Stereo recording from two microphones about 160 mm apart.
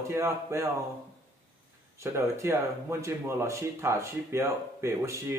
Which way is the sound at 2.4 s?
15° right (ahead or behind).